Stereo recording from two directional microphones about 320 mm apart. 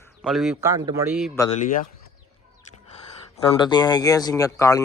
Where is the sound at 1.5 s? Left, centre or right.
Left.